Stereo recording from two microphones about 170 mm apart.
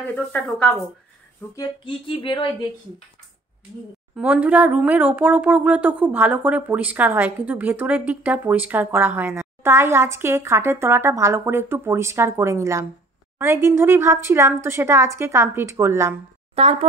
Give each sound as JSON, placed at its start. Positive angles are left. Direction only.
{"t": 0.5, "sound": "speech", "side_deg": 5}
{"t": 1.5, "sound": "a sound", "side_deg": 20}
{"t": 4.1, "sound": "speech", "side_deg": -10}
{"t": 16.5, "sound": "speech", "side_deg": -40}